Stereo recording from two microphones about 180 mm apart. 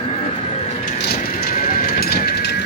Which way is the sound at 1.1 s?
50° left (ahead or behind).